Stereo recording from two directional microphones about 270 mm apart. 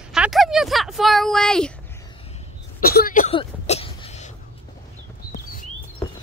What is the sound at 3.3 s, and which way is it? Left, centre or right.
Throat clearing, left.